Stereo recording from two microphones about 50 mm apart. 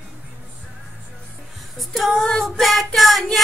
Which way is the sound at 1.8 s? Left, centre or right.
Centre.